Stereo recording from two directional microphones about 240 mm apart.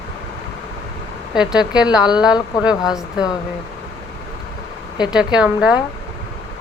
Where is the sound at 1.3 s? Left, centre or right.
Centre.